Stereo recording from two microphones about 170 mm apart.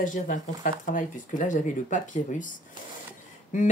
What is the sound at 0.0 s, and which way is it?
Speech, 50° left (ahead or behind).